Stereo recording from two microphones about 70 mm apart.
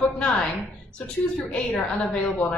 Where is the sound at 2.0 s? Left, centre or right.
Centre.